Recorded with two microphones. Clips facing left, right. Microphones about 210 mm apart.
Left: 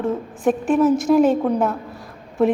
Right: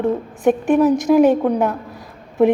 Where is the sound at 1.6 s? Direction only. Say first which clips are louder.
Right 2 dB; centre (ahead or behind).